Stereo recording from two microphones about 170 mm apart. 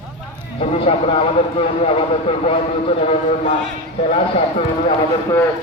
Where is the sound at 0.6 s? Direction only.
35° left (ahead or behind).